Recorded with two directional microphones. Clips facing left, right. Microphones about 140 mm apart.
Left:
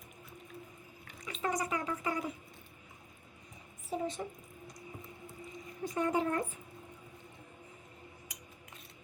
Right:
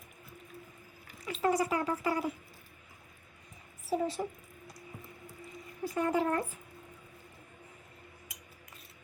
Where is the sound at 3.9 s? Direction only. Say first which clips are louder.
Right 5 dB; 90° right.